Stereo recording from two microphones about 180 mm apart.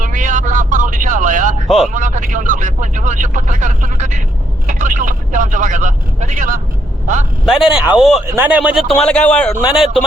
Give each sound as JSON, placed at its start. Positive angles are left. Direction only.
{"t": 0.0, "sound": "a sound", "side_deg": -45}
{"t": 1.6, "sound": "speech", "side_deg": 0}
{"t": 1.9, "sound": "speech", "side_deg": -45}
{"t": 7.4, "sound": "speech", "side_deg": -5}
{"t": 9.0, "sound": "speech", "side_deg": 5}